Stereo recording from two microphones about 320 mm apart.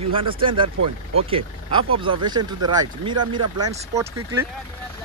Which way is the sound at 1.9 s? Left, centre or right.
Centre.